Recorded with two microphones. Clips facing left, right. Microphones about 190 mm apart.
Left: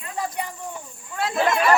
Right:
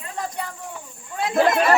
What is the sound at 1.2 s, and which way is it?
Speech, 20° right (ahead or behind).